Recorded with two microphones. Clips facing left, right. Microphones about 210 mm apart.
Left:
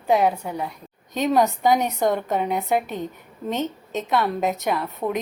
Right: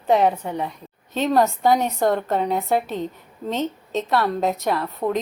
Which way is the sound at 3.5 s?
15° left (ahead or behind).